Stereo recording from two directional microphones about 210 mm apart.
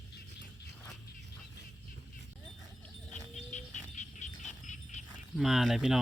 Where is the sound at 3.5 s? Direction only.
35° left (ahead or behind).